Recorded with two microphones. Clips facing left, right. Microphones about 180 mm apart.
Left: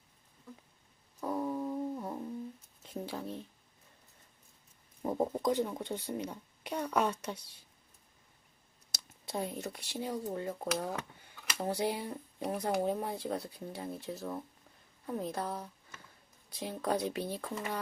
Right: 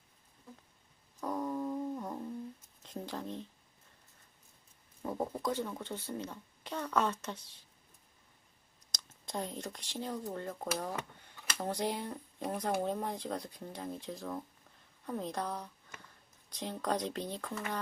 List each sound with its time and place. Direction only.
1.2 s music: 5° left (ahead or behind)
2.8 s speech: 5° left (ahead or behind)
5.0 s speech: 20° left (ahead or behind)
8.9 s a woman's voice: 10° left (ahead or behind)